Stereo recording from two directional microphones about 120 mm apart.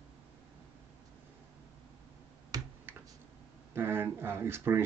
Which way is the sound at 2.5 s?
30° right (ahead or behind).